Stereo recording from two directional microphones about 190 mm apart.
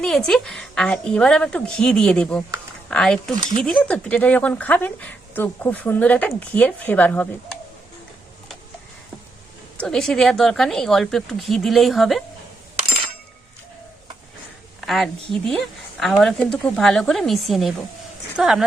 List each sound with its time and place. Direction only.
0.0 s speech: 5° left (ahead or behind)
9.7 s speech: 5° left (ahead or behind)
14.8 s speech: centre (ahead or behind)